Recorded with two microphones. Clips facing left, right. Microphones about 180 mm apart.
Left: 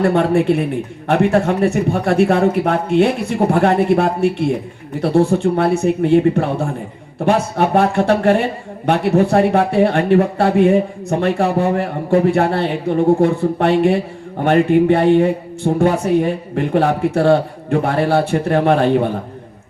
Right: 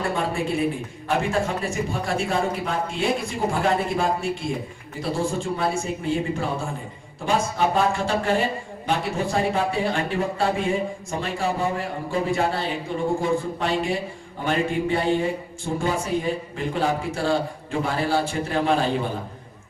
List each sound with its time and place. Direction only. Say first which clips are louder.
0.0 s speech: left 11 dB; 65° left (ahead or behind)